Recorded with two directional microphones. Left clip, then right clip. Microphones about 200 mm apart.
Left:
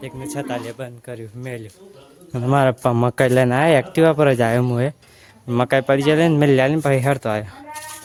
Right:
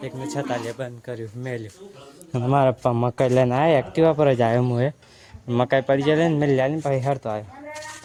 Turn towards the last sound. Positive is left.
turn(degrees=30)  # may be behind; listen again after turning